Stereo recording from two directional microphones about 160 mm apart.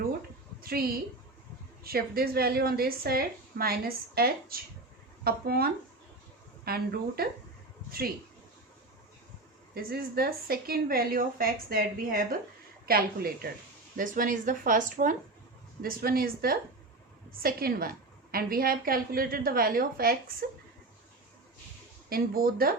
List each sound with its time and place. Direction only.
0.6 s a sound: 70° right (ahead or behind)
1.8 s a woman's voice: 70° right (ahead or behind)
9.7 s a woman's voice: 70° right (ahead or behind)
13.9 s a woman's voice: 60° right (ahead or behind)
15.8 s a woman's voice: 70° right (ahead or behind)
22.1 s a woman's voice: 65° right (ahead or behind)